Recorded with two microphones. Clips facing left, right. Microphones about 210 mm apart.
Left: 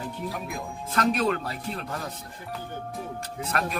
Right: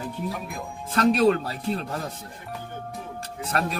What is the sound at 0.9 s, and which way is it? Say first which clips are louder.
Speech: right 5 dB; 35° right (ahead or behind).